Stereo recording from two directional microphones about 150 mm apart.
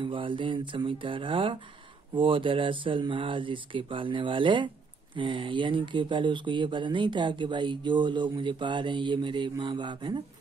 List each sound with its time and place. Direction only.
0.0 s speech: 35° right (ahead or behind)